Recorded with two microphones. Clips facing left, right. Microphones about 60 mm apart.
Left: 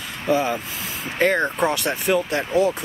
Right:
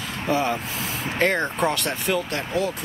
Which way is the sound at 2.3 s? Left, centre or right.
Centre.